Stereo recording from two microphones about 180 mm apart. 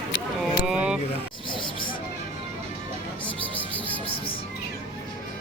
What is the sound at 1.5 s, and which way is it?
Hubbub, 25° left (ahead or behind).